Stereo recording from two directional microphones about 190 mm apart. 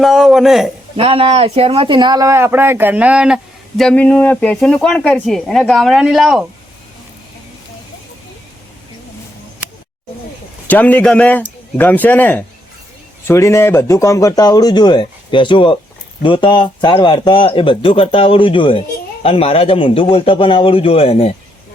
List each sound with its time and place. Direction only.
0.0 s speech: centre (ahead or behind)
0.9 s speech: 30° right (ahead or behind); by 6.4 s centre (ahead or behind)
10.7 s a man's voice: 10° left (ahead or behind); by 21.3 s 30° left (ahead or behind)